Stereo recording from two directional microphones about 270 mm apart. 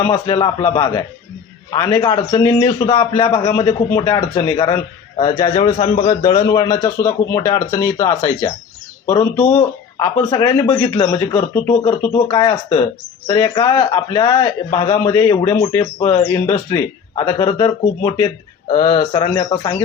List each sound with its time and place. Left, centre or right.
0.1 s a man's voice: centre